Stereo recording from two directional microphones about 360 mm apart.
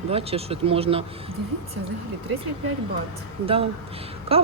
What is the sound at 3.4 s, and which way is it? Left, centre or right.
Speech, centre.